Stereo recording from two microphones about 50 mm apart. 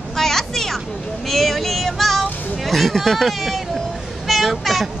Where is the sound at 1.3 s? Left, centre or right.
Centre.